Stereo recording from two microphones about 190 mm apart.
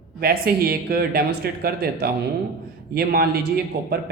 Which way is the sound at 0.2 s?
55° right (ahead or behind).